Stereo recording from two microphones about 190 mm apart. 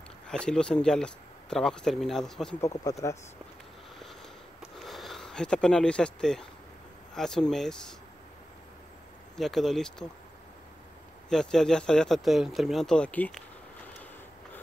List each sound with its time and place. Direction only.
0.3 s speech: 5° left (ahead or behind)
2.6 s speech: 15° left (ahead or behind)
4.7 s speech: centre (ahead or behind)
9.4 s speech: centre (ahead or behind)
11.2 s speech: 5° left (ahead or behind)